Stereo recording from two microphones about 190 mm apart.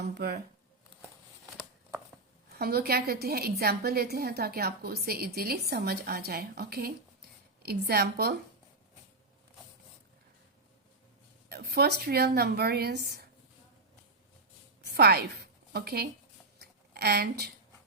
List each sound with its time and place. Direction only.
0.1 s speech: 55° right (ahead or behind)
2.5 s a woman's voice: 55° right (ahead or behind)
11.4 s a woman's voice: 55° right (ahead or behind)
14.9 s a woman's voice: 55° right (ahead or behind)
16.6 s a sound: 55° right (ahead or behind)